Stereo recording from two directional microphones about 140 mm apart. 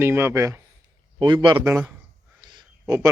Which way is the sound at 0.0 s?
15° right (ahead or behind).